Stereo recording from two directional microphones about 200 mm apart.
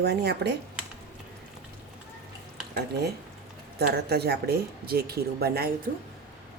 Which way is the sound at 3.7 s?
55° right (ahead or behind).